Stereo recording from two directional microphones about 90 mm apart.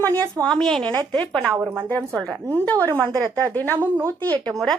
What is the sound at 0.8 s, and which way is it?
Speech, 15° left (ahead or behind).